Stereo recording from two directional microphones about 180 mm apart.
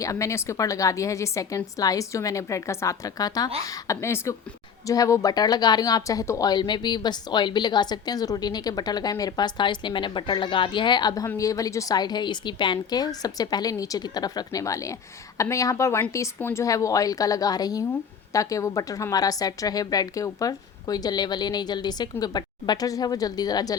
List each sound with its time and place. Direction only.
0.0 s a woman's voice: 15° left (ahead or behind)